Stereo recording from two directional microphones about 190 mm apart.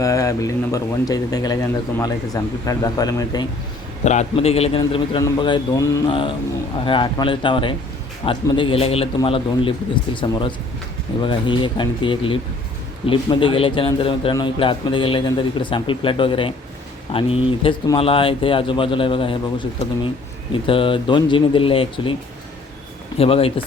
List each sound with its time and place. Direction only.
0.0 s a man's voice: 15° left (ahead or behind)
4.0 s a man's voice: 35° left (ahead or behind)
23.1 s speech: 30° left (ahead or behind)